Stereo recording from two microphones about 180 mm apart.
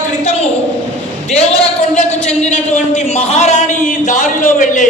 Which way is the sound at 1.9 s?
40° left (ahead or behind).